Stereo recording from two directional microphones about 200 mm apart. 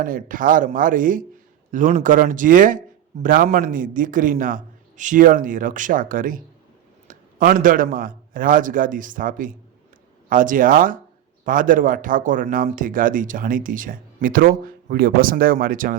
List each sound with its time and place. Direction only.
0.0 s a man's voice: 45° right (ahead or behind)